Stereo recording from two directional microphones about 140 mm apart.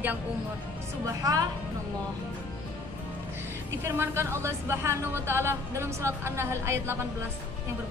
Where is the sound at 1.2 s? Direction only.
25° right (ahead or behind).